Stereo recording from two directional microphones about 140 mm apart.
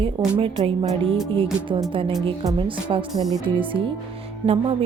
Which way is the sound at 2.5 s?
35° right (ahead or behind).